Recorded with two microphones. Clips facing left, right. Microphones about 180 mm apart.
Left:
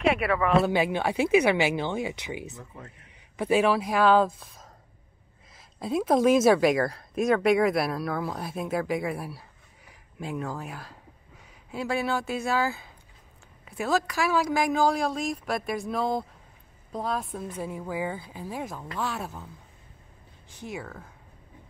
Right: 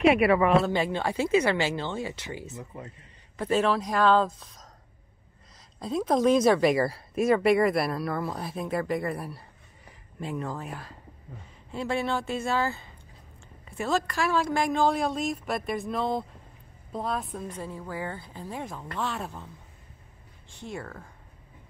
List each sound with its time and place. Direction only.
0.1 s speech: 10° right (ahead or behind)
0.7 s speech: 10° left (ahead or behind)
2.5 s speech: 15° right (ahead or behind)
3.3 s a woman's voice: 10° left (ahead or behind)
20.6 s a woman's voice: 5° left (ahead or behind)